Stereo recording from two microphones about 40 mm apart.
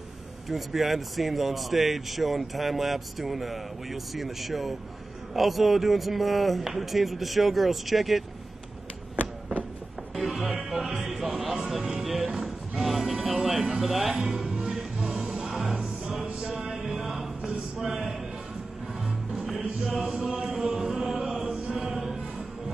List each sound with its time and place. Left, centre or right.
0.5 s speech: centre
10.1 s music: centre
13.7 s speech: centre
14.3 s music: centre
16.3 s music: right
16.5 s music: centre
17.7 s a sound: centre
20.0 s a sound: centre
20.4 s chant: centre